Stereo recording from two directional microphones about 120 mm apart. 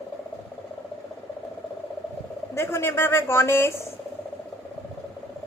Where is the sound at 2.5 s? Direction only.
20° left (ahead or behind).